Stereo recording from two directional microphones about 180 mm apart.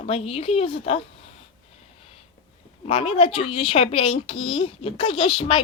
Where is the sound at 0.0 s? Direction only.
35° left (ahead or behind).